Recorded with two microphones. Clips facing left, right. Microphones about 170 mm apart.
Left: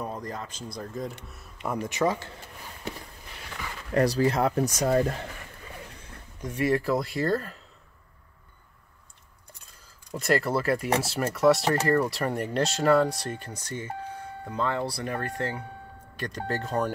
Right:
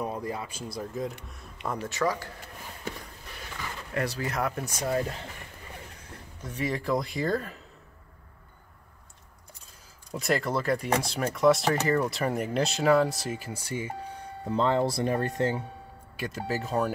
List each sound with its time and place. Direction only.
0.0 s speech: 10° right (ahead or behind)
1.8 s speech: 20° left (ahead or behind)
3.9 s speech: 40° left (ahead or behind)
4.6 s speech: 45° left (ahead or behind)
6.4 s speech: 10° left (ahead or behind)
10.1 s speech: centre (ahead or behind)
14.4 s speech: 25° right (ahead or behind)
16.2 s speech: 5° right (ahead or behind)